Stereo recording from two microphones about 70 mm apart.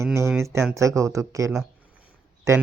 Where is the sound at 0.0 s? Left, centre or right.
Right.